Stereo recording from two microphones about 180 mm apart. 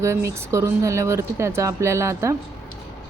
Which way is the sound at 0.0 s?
15° right (ahead or behind).